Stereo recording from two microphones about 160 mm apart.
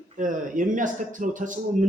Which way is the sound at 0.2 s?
55° right (ahead or behind).